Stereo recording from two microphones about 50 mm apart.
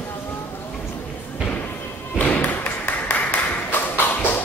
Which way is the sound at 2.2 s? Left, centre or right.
Left.